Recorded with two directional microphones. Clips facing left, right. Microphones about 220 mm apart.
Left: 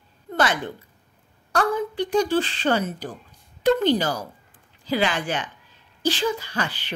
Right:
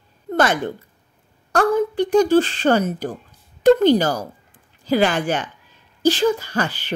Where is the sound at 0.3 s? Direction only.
45° right (ahead or behind).